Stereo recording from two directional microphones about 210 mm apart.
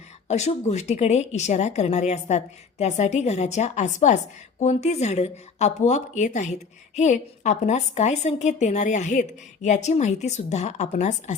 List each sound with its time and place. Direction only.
0.3 s a woman's voice: 30° left (ahead or behind)